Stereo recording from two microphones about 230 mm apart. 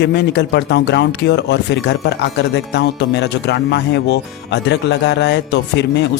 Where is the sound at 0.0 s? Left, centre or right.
Left.